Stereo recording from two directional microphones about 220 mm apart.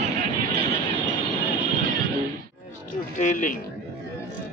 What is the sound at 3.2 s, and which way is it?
Speech, 35° left (ahead or behind).